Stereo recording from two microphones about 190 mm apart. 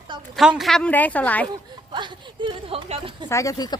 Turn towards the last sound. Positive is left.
turn(degrees=20)  # may be behind; listen again after turning